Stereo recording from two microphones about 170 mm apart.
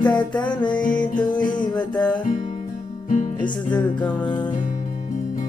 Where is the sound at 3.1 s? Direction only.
50° left (ahead or behind).